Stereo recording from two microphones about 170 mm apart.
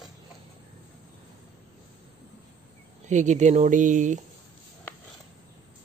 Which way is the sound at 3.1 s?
45° right (ahead or behind).